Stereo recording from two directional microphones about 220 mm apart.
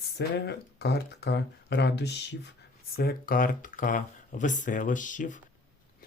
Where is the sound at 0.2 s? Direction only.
50° left (ahead or behind).